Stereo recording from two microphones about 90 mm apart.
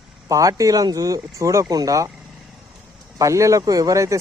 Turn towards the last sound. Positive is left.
turn(degrees=-35)  # may be behind; listen again after turning